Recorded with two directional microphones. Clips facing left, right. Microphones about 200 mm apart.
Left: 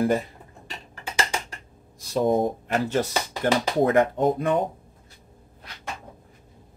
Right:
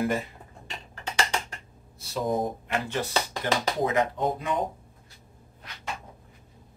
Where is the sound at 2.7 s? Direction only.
40° left (ahead or behind).